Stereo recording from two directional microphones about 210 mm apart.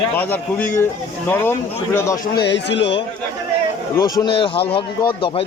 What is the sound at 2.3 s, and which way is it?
Speech, 55° left (ahead or behind).